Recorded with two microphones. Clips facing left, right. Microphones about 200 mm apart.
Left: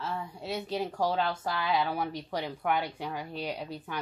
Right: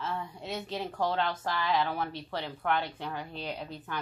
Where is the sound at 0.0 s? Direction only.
5° left (ahead or behind).